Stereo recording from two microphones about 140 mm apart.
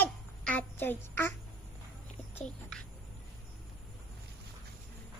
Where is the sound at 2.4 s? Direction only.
5° left (ahead or behind).